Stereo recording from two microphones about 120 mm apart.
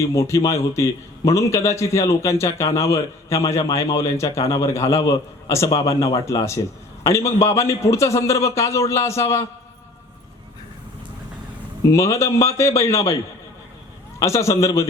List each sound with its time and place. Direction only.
0.0 s a man's voice: 25° left (ahead or behind)
11.9 s a man's voice: 25° left (ahead or behind)
14.2 s a man's voice: 25° left (ahead or behind)